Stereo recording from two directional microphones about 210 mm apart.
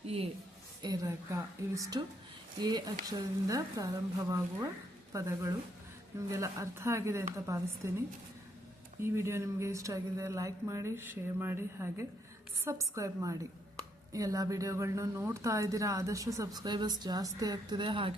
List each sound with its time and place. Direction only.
0.0 s a woman's voice: 30° right (ahead or behind)
0.8 s speech: 15° right (ahead or behind)